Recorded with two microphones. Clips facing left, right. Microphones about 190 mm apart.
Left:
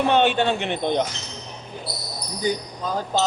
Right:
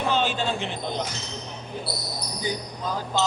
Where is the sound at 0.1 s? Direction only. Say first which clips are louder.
Left 4 dB; 65° left (ahead or behind).